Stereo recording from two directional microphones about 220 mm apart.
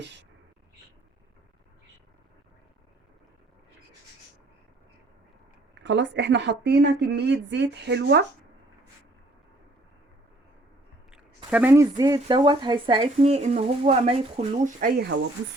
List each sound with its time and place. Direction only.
0.0 s speech: 50° right (ahead or behind)
5.8 s a woman's voice: 55° right (ahead or behind)
11.5 s speech: 10° right (ahead or behind); by 15.0 s 40° right (ahead or behind)